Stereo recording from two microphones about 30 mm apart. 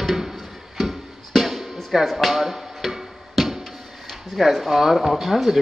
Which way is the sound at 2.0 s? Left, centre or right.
Centre.